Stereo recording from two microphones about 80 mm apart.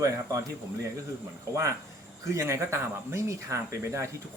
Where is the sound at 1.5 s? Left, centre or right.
Right.